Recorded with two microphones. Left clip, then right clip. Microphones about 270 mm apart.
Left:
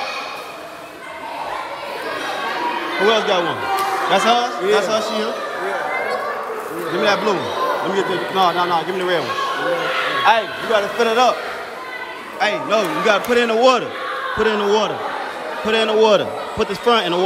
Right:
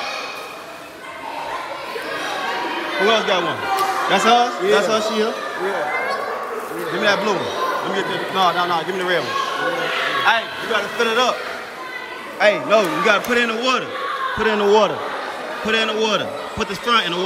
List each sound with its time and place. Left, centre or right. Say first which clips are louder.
3.1 s a man's voice: left 1 dB; centre
7.0 s a man's voice: left 1 dB; centre
10.2 s speech: left 5 dB; left
12.4 s a man's voice: right 3 dB; centre